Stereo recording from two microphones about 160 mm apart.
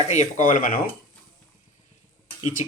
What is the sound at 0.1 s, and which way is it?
Speech, 50° left (ahead or behind).